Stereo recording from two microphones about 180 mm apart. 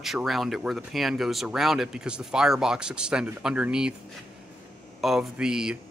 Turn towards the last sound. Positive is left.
turn(degrees=-5)  # may be behind; listen again after turning